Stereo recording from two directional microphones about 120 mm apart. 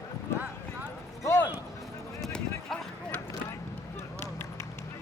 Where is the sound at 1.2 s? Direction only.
20° left (ahead or behind).